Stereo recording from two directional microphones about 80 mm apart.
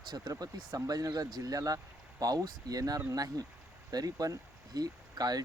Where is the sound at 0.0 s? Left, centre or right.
Right.